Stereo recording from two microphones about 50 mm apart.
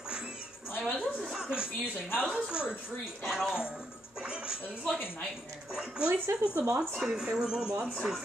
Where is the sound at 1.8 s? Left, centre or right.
Left.